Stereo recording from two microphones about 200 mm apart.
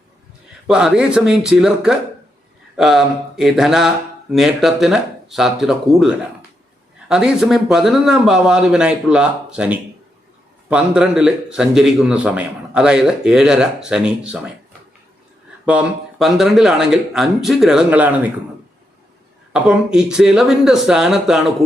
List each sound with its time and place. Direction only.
0.7 s a man's voice: 5° right (ahead or behind)
15.6 s a man's voice: 5° right (ahead or behind)
19.5 s a man's voice: 5° right (ahead or behind)